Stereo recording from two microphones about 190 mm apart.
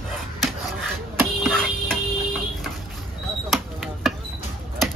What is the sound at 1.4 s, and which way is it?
Music, 5° left (ahead or behind).